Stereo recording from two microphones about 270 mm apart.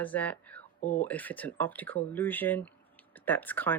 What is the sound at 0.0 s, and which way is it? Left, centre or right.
Speech, centre.